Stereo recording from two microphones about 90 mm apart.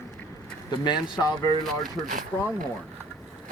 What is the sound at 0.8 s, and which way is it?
Speech, 55° left (ahead or behind).